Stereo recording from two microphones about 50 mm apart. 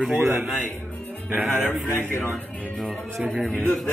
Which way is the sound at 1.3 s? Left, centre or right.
Right.